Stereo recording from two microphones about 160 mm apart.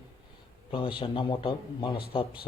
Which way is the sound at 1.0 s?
30° left (ahead or behind).